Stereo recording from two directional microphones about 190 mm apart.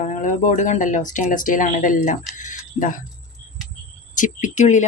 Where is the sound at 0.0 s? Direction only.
40° left (ahead or behind).